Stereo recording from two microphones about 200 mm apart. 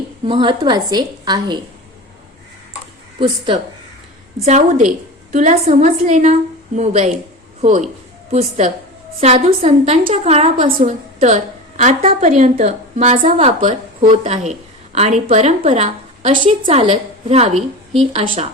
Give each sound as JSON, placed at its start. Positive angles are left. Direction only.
{"t": 0.3, "sound": "a woman's voice", "side_deg": -25}
{"t": 3.2, "sound": "a woman's voice", "side_deg": -25}
{"t": 5.3, "sound": "a woman's voice", "side_deg": -40}
{"t": 10.7, "sound": "a woman's voice", "side_deg": -40}